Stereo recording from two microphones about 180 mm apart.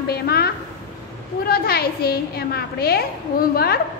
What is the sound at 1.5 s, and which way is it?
A woman's voice, 60° left (ahead or behind).